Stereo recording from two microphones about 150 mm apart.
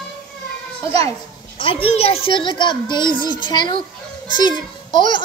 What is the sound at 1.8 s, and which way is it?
A child's voice, 40° left (ahead or behind).